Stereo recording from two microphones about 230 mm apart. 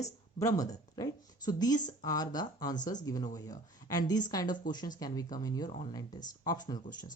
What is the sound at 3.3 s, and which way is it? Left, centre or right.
Speech, centre.